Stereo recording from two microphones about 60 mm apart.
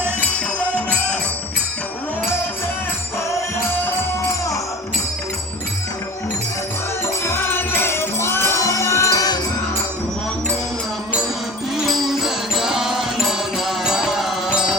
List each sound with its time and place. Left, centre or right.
7.3 s music: left
8.5 s music: left
11.9 s music: centre